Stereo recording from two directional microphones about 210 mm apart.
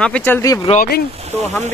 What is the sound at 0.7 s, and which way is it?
Speech, 45° left (ahead or behind).